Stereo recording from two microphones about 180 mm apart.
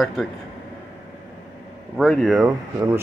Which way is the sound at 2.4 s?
15° right (ahead or behind).